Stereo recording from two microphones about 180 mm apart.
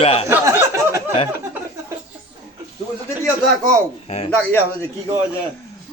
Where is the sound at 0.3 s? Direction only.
15° right (ahead or behind).